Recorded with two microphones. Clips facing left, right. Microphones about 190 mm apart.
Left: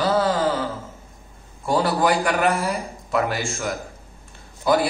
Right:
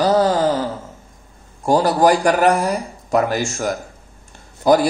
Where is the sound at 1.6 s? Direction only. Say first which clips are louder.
Right 6 dB; 40° right (ahead or behind).